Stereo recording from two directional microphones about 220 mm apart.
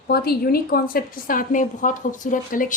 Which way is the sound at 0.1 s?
45° left (ahead or behind).